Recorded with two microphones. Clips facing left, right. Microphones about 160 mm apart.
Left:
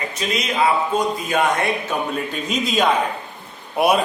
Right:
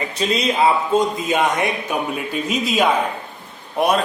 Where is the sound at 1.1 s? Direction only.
20° right (ahead or behind).